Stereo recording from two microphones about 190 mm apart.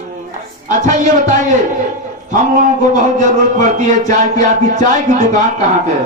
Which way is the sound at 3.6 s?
40° right (ahead or behind).